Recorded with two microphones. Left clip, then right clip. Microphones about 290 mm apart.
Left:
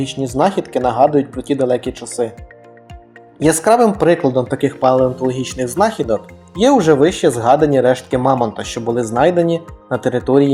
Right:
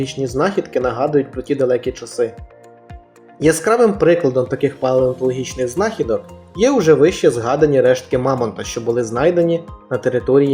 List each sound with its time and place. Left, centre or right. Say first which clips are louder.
0.0 s speech: left 2 dB; centre
3.4 s speech: left 1 dB; centre